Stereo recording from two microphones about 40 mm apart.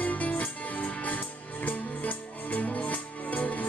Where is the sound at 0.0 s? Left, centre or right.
Left.